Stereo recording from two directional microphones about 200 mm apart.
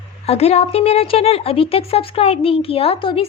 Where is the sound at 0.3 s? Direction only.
30° left (ahead or behind).